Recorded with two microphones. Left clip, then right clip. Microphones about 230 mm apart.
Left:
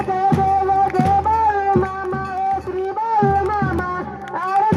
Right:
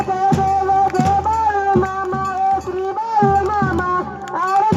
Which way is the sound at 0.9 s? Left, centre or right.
Right.